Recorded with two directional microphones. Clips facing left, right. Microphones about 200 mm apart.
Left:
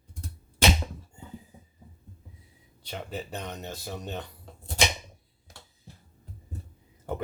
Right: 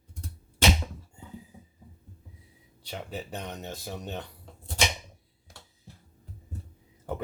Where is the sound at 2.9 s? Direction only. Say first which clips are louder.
Left 1 dB; 10° right (ahead or behind).